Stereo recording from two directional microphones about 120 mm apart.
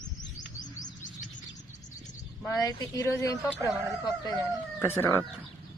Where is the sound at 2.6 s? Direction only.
30° left (ahead or behind).